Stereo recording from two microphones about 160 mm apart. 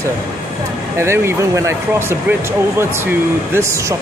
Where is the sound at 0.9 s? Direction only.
15° right (ahead or behind).